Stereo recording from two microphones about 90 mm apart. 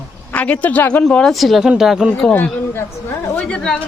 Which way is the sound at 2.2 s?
20° left (ahead or behind).